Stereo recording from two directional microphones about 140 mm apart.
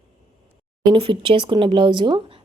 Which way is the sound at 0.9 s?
40° right (ahead or behind).